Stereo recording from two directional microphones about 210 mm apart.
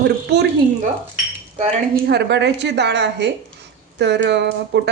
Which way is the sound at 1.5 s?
50° right (ahead or behind).